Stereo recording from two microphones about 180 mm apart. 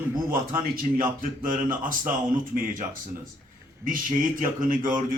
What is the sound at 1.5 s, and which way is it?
Speech, 50° right (ahead or behind).